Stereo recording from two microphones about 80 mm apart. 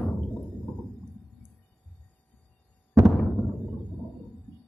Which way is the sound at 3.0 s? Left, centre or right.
Right.